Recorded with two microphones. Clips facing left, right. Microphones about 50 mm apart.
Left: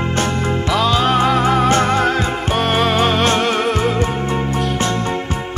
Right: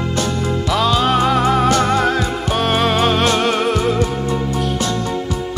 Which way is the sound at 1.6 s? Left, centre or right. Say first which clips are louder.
Even; left.